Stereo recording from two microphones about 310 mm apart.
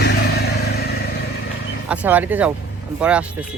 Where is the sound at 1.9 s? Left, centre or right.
Centre.